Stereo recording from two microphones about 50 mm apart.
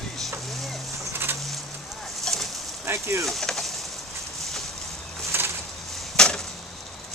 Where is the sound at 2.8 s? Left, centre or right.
Right.